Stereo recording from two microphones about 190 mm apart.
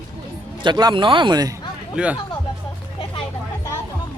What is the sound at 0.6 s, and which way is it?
Speech, 20° right (ahead or behind).